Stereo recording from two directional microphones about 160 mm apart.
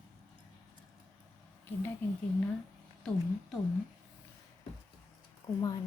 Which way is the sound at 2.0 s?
10° left (ahead or behind).